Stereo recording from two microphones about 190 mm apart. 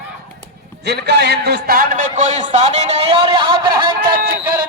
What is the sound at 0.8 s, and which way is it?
A man's voice, 60° right (ahead or behind).